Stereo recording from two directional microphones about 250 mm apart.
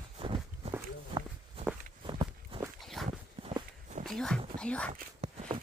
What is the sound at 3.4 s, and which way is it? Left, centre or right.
Walk, right.